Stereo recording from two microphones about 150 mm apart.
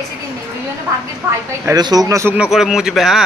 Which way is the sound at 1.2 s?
15° right (ahead or behind).